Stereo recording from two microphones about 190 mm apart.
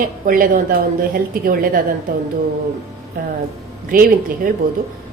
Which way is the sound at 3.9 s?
45° right (ahead or behind).